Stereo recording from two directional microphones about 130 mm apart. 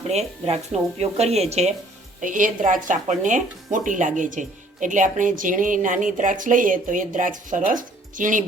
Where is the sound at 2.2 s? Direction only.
90° right.